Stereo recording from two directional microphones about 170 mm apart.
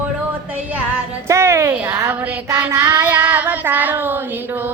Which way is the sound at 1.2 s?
15° right (ahead or behind).